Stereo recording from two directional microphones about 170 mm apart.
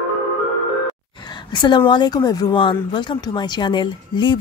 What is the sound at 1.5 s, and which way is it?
Speech, 25° left (ahead or behind).